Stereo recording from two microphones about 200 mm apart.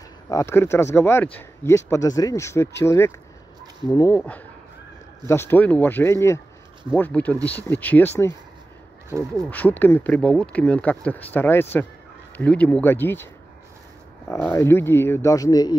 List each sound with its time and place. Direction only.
0.3 s speech: 15° left (ahead or behind)
4.2 s speech: 5° left (ahead or behind)
9.5 s speech: 10° left (ahead or behind)